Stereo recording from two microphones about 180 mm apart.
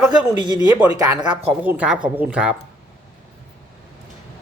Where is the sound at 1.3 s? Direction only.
35° right (ahead or behind).